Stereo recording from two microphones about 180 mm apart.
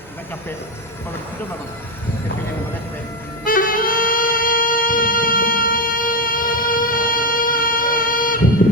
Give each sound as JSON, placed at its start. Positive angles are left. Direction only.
{"t": 3.4, "sound": "saxophone", "side_deg": 50}